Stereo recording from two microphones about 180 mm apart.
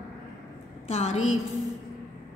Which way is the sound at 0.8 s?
35° left (ahead or behind).